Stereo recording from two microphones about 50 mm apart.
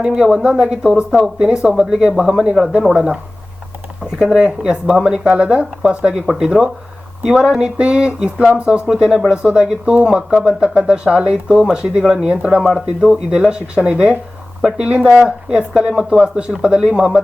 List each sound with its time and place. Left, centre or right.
0.2 s speech: centre
4.2 s speech: centre